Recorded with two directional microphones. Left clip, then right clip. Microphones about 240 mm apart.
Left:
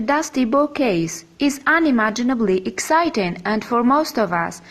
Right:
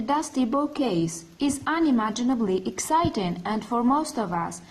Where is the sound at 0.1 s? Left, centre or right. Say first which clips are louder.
Left 7 dB; left.